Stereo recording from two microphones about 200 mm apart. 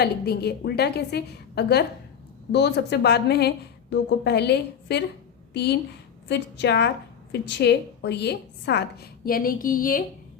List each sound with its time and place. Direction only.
0.0 s a woman's voice: 55° left (ahead or behind)
6.2 s a woman's voice: 60° left (ahead or behind); by 10.0 s 45° left (ahead or behind)